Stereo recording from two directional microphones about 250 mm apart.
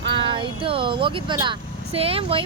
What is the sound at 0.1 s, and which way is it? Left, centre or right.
Speech, centre.